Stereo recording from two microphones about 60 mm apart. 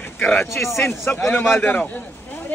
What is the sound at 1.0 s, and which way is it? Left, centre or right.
Speech, left.